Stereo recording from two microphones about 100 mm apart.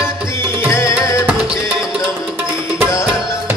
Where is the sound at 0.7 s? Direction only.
30° left (ahead or behind).